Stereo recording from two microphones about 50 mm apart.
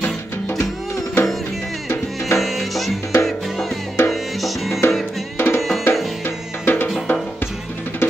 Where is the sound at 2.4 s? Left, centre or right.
Centre.